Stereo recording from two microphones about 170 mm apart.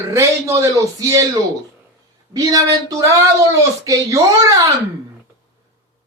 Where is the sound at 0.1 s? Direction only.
15° right (ahead or behind).